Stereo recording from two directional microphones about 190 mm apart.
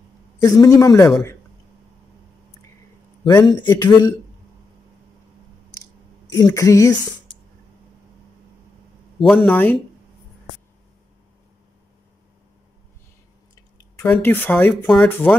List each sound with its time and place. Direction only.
0.4 s speech: 20° left (ahead or behind)
3.3 s speech: 20° left (ahead or behind)
6.3 s speech: 15° left (ahead or behind)
9.5 s speech: 10° left (ahead or behind)
14.0 s speech: 10° left (ahead or behind)